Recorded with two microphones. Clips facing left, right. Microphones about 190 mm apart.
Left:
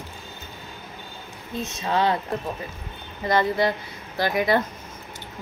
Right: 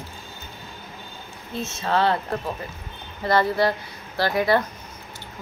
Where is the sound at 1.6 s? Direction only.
15° left (ahead or behind).